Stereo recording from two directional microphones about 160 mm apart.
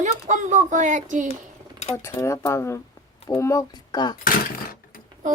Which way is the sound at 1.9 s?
15° left (ahead or behind).